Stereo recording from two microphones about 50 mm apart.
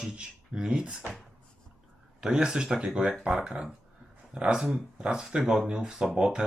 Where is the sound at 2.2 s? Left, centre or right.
Centre.